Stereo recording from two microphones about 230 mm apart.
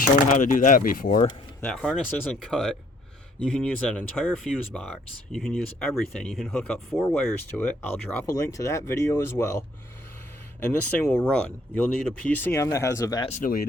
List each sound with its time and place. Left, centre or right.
0.0 s speech: left
1.6 s speech: centre
13.3 s speech: left